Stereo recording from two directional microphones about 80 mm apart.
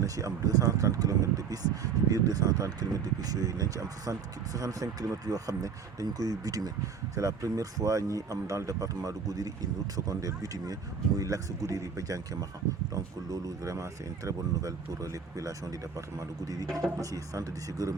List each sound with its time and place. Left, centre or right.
0.0 s speech: right